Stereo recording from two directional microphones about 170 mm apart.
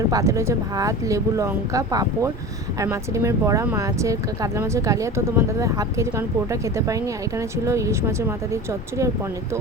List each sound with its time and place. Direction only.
0.1 s speech: 20° right (ahead or behind)